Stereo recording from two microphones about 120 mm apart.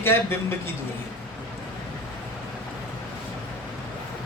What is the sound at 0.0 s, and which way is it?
Speech, 20° left (ahead or behind).